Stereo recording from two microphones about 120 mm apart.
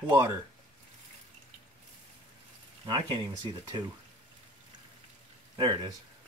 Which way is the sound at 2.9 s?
40° right (ahead or behind).